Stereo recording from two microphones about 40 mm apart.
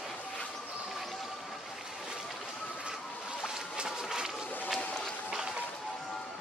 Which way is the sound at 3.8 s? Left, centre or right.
Centre.